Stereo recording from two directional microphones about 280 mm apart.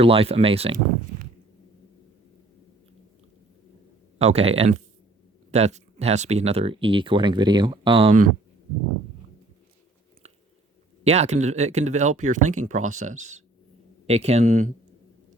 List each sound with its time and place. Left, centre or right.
0.0 s speech: right
4.2 s speech: right
11.0 s speech: right